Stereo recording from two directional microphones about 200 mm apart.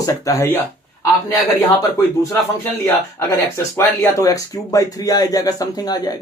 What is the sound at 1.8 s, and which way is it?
Speech, 15° left (ahead or behind).